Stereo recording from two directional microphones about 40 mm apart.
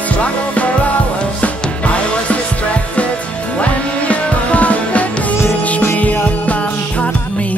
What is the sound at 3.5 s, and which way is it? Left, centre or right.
Music, left.